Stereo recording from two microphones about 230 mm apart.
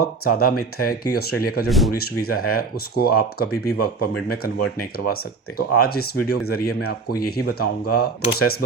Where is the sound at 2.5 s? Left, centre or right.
Left.